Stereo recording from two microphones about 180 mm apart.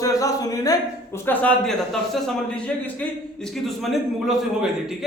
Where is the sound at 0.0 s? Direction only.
20° left (ahead or behind).